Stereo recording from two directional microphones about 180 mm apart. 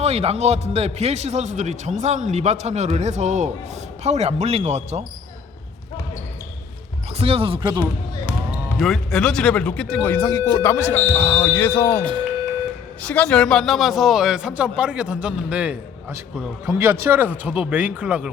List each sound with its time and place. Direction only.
0.0 s a man's voice: 35° right (ahead or behind)
7.2 s a man's voice: 35° right (ahead or behind)
7.8 s basketball bounce: 10° left (ahead or behind)
8.8 s a man's voice: centre (ahead or behind)